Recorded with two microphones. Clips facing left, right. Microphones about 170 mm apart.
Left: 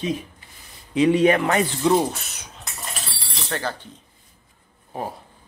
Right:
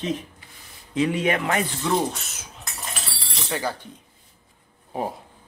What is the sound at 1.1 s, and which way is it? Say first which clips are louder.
Speech: left 5 dB; 35° left (ahead or behind).